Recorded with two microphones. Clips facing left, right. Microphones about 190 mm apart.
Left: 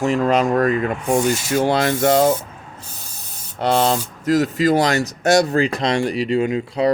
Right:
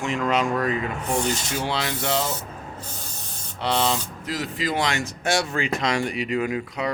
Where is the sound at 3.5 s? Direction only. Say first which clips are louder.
Left 6 dB; 45° left (ahead or behind).